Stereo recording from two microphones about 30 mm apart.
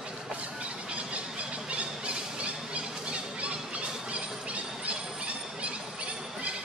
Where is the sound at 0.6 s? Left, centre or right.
Right.